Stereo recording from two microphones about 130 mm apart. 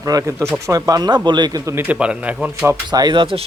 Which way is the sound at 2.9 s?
35° right (ahead or behind).